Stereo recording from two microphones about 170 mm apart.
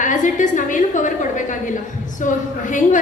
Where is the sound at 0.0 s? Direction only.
50° left (ahead or behind).